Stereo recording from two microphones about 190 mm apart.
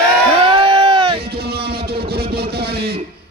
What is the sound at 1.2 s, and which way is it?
Music, 55° right (ahead or behind).